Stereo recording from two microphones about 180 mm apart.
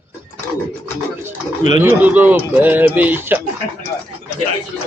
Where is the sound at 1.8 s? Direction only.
10° right (ahead or behind).